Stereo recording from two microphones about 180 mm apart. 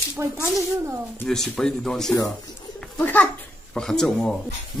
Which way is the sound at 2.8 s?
5° left (ahead or behind).